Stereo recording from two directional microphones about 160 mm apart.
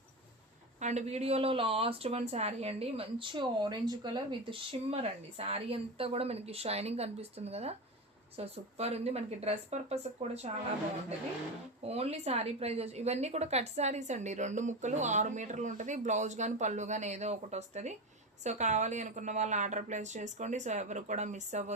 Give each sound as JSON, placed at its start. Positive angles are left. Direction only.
{"t": 0.8, "sound": "speech", "side_deg": -45}
{"t": 11.9, "sound": "a woman's voice", "side_deg": -40}